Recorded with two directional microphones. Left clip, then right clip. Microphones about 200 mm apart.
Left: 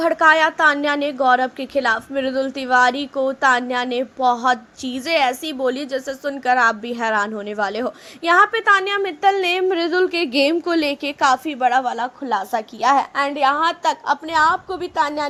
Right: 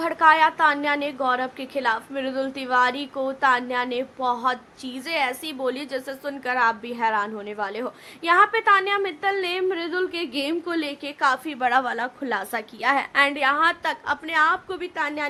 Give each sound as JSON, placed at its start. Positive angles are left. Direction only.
{"t": 0.0, "sound": "a woman's voice", "side_deg": 20}
{"t": 11.6, "sound": "a woman's voice", "side_deg": 5}